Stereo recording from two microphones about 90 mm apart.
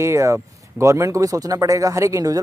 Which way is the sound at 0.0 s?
30° right (ahead or behind).